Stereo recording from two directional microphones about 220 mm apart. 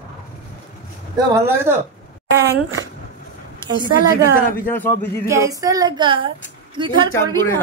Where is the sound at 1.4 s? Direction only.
10° right (ahead or behind).